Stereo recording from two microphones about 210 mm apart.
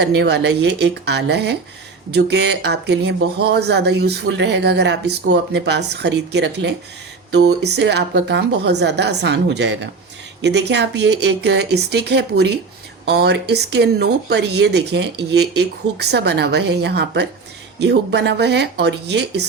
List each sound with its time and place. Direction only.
0.0 s speech: 55° right (ahead or behind)